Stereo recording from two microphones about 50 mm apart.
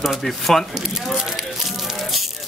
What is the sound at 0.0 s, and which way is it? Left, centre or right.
Speech, centre.